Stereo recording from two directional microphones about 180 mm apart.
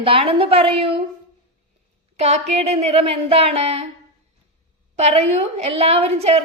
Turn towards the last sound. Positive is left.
turn(degrees=-35)  # may be behind; listen again after turning